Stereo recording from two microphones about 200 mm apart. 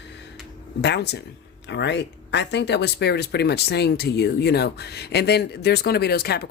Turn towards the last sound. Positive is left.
turn(degrees=50)  # may be behind; listen again after turning